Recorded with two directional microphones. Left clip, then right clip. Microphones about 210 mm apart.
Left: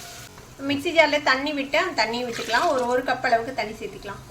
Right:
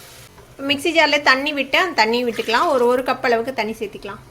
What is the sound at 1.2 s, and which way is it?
A woman's voice, 40° right (ahead or behind).